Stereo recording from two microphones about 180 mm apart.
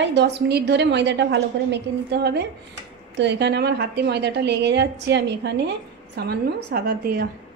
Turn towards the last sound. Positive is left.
turn(degrees=-60)  # may be behind; listen again after turning